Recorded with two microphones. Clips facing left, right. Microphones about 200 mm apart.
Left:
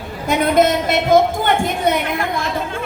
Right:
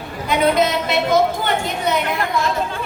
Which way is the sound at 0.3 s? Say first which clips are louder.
Left 2 dB; 50° left (ahead or behind).